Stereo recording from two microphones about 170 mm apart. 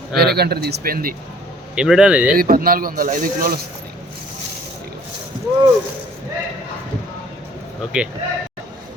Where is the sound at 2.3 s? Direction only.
60° right (ahead or behind).